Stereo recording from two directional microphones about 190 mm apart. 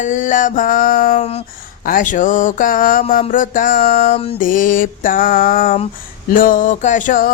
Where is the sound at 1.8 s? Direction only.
45° left (ahead or behind).